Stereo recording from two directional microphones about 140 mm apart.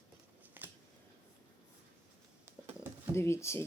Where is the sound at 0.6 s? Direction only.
15° right (ahead or behind).